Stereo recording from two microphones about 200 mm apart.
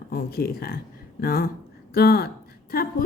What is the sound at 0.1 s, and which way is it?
Speech, 50° left (ahead or behind).